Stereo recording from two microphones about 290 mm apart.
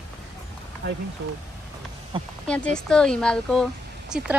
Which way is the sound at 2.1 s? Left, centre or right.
Centre.